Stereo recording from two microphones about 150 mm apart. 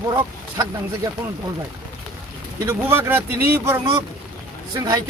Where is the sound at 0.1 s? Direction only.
25° right (ahead or behind).